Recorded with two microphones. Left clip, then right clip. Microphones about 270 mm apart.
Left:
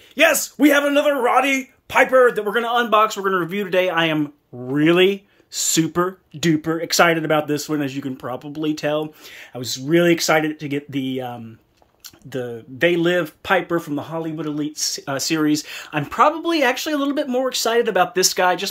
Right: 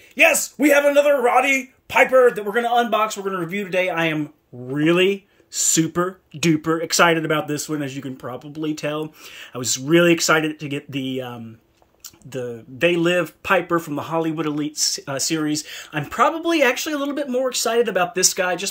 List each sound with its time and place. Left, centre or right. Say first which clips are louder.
0.1 s speech: even; centre